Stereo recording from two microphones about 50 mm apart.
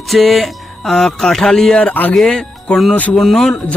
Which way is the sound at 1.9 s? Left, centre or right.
Left.